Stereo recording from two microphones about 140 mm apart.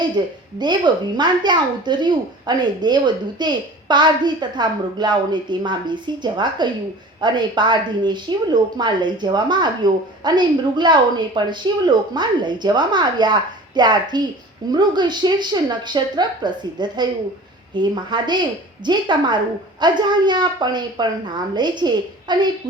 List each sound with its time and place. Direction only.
0.2 s a woman's voice: 30° right (ahead or behind)